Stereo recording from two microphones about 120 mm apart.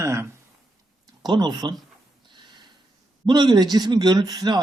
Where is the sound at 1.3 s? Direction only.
40° right (ahead or behind).